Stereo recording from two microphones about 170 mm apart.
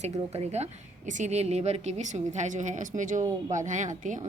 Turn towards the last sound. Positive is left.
turn(degrees=-45)  # may be behind; listen again after turning